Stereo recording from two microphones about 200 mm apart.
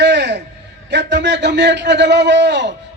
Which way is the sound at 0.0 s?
60° right (ahead or behind).